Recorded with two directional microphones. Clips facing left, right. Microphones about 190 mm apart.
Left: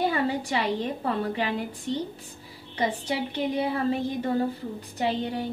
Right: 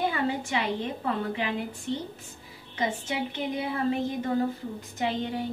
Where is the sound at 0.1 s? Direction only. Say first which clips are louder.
Left 2 dB; 35° left (ahead or behind).